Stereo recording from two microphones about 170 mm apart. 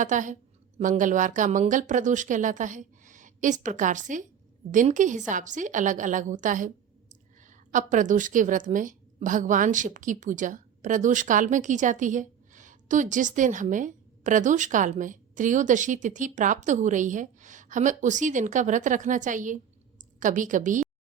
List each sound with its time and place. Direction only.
0.0 s a woman's voice: 50° right (ahead or behind)